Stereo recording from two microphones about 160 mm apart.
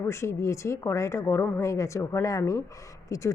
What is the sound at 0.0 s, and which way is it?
A woman's voice, 15° left (ahead or behind).